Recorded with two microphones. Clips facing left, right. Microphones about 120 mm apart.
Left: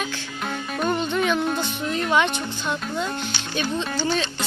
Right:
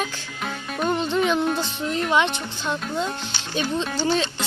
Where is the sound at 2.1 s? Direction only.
25° right (ahead or behind).